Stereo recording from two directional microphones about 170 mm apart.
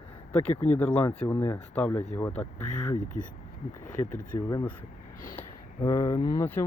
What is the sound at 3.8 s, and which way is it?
Speech, 50° left (ahead or behind).